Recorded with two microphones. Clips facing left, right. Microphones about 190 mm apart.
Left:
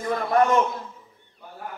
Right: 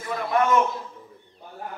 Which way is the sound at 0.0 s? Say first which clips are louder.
Left 3 dB; 40° left (ahead or behind).